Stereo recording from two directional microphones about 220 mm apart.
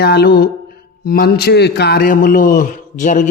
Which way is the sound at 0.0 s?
45° left (ahead or behind).